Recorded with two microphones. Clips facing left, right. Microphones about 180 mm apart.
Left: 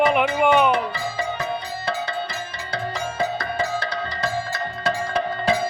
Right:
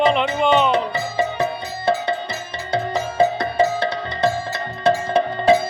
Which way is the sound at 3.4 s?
25° right (ahead or behind).